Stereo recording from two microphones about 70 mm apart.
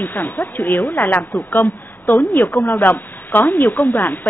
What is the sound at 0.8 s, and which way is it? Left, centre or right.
Speech, left.